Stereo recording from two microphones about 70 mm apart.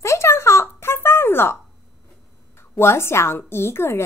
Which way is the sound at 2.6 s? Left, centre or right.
Left.